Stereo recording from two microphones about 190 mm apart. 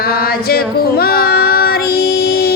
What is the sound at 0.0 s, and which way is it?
Female singing, 55° left (ahead or behind).